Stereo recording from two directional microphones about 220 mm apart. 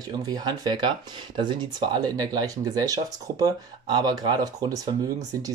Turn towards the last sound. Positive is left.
turn(degrees=-15)  # may be behind; listen again after turning